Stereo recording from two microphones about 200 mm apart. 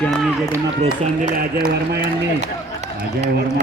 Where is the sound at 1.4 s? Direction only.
50° right (ahead or behind).